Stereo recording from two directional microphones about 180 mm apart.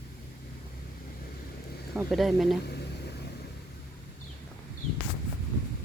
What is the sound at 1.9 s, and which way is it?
Speech, centre (ahead or behind).